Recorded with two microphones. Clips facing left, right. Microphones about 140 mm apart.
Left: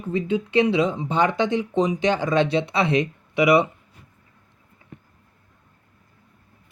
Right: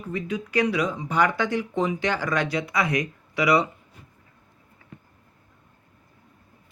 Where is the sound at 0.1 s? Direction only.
25° left (ahead or behind).